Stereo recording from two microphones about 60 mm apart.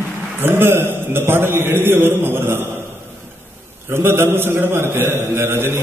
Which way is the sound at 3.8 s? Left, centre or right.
Right.